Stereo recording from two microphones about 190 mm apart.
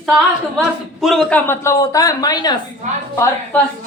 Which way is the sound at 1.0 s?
5° left (ahead or behind).